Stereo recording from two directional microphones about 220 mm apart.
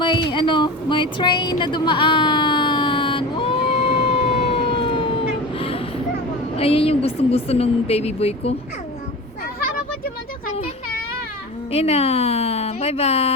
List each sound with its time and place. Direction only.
0.0 s a sound: 20° left (ahead or behind)
6.6 s a woman's voice: 25° left (ahead or behind)
11.7 s speech: 30° left (ahead or behind)